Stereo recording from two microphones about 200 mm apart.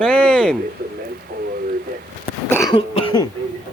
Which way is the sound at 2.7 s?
30° left (ahead or behind).